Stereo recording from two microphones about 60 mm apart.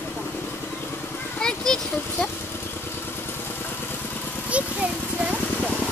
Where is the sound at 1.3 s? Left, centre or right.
Centre.